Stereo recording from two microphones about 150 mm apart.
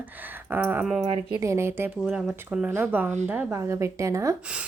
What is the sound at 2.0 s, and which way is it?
A woman's voice, 5° right (ahead or behind).